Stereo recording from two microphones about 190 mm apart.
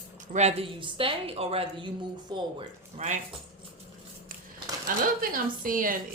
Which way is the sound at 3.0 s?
40° right (ahead or behind).